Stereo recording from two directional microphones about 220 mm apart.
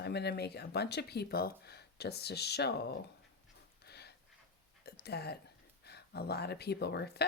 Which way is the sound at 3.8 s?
45° left (ahead or behind).